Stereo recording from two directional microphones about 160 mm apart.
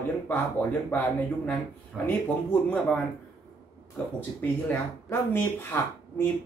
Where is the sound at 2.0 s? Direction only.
10° left (ahead or behind).